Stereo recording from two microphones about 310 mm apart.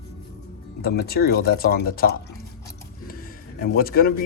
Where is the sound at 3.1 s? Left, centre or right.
Left.